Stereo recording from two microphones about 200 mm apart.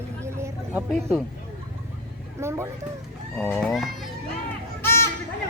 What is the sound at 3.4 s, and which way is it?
Speech, 5° left (ahead or behind).